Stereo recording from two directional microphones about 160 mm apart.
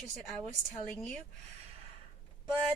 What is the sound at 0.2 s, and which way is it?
A woman's voice, centre (ahead or behind).